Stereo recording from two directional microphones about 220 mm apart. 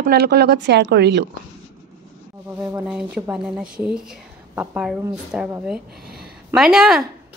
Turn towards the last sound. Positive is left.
turn(degrees=0)  # may be behind; listen again after turning